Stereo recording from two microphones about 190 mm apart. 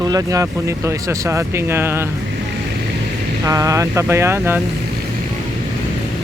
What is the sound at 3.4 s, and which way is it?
Speech, 20° right (ahead or behind).